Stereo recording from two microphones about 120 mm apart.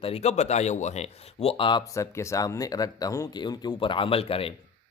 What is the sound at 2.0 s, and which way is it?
Speech, 25° left (ahead or behind).